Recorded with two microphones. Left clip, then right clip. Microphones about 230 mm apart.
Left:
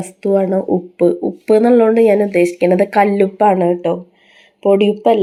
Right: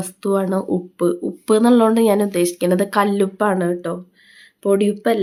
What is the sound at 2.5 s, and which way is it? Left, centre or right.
Speech, right.